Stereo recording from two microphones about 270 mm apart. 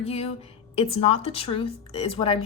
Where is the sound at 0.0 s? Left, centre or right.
Left.